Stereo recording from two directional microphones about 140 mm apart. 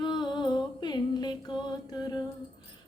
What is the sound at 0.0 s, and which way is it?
Music, 30° left (ahead or behind).